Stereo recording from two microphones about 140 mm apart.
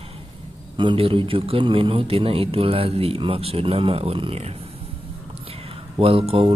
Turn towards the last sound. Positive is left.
turn(degrees=-40)  # may be behind; listen again after turning